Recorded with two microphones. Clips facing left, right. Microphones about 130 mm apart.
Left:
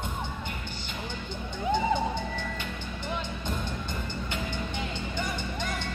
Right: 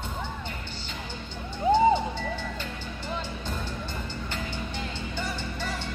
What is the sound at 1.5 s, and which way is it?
Music, 10° right (ahead or behind).